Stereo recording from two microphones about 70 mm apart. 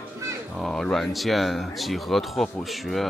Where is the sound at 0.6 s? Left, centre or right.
Centre.